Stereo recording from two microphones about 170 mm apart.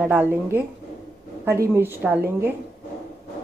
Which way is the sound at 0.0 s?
10° right (ahead or behind).